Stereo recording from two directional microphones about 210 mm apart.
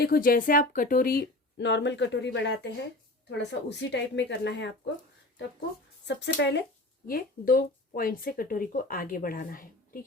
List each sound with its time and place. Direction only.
0.0 s a woman's voice: 45° left (ahead or behind)
6.1 s a woman's voice: 55° left (ahead or behind)
7.1 s speech: 45° left (ahead or behind)